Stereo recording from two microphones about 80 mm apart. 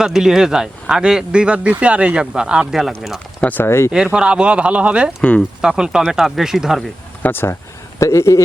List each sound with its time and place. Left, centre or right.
0.0 s speech: centre
3.4 s speech: left
3.7 s speech: left
3.9 s speech: centre
7.2 s speech: left
7.9 s speech: left